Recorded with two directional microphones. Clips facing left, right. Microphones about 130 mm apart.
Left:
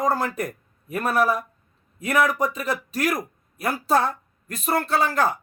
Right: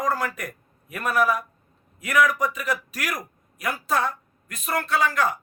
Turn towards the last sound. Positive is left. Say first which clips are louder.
# left 2 dB
turn(degrees=30)  # may be behind; listen again after turning